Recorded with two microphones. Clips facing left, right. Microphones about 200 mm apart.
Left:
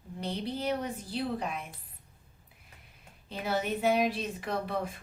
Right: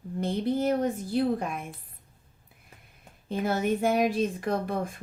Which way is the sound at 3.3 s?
45° right (ahead or behind).